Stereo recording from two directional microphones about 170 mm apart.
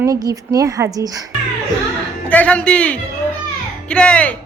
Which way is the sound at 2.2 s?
10° left (ahead or behind).